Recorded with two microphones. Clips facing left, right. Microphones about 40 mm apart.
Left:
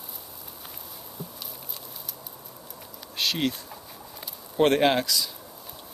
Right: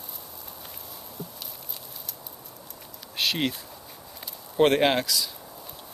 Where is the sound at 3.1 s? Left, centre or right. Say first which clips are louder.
Even; centre.